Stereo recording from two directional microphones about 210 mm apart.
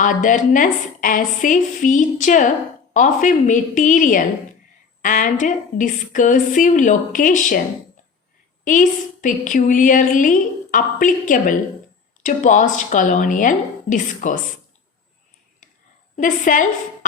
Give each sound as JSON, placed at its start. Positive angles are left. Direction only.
{"t": 0.0, "sound": "a woman's voice", "side_deg": 40}
{"t": 8.6, "sound": "a woman's voice", "side_deg": 40}
{"t": 16.1, "sound": "a woman's voice", "side_deg": 40}